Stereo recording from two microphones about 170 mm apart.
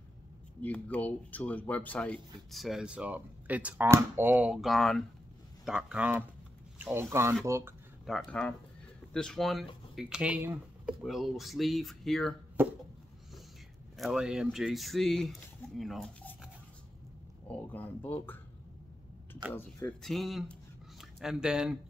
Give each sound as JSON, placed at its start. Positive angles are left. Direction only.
{"t": 0.6, "sound": "speech", "side_deg": 10}
{"t": 8.1, "sound": "speech", "side_deg": 5}
{"t": 12.6, "sound": "speech", "side_deg": -10}
{"t": 13.9, "sound": "speech", "side_deg": 0}
{"t": 17.5, "sound": "speech", "side_deg": 10}
{"t": 19.5, "sound": "speech", "side_deg": 10}
{"t": 20.0, "sound": "speech", "side_deg": 0}